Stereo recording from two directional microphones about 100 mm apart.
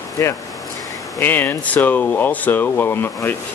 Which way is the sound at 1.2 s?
20° left (ahead or behind).